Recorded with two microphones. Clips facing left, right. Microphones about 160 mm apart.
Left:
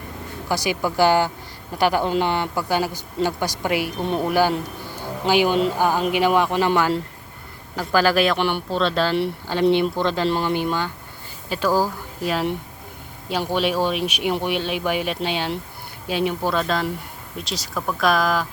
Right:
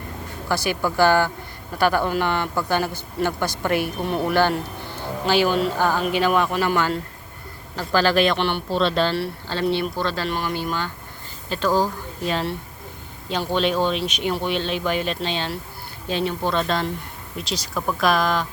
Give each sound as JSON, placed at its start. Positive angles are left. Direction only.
{"t": 0.4, "sound": "a woman's voice", "side_deg": 15}
{"t": 8.7, "sound": "speech", "side_deg": 0}
{"t": 9.1, "sound": "speech", "side_deg": 15}
{"t": 10.2, "sound": "speech", "side_deg": 30}
{"t": 10.5, "sound": "a woman's voice", "side_deg": 15}